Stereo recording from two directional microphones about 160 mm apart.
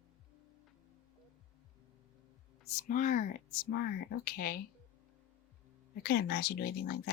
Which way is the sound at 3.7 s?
75° left (ahead or behind).